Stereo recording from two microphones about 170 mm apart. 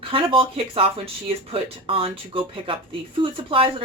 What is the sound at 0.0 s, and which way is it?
Speech, 30° right (ahead or behind).